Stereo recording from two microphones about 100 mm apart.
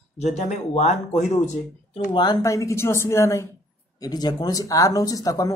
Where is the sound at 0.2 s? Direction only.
90° left.